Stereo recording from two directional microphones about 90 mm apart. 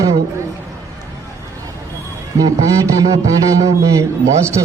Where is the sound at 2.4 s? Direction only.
40° right (ahead or behind).